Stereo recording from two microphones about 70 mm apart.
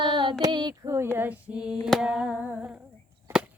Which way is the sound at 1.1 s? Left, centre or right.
Right.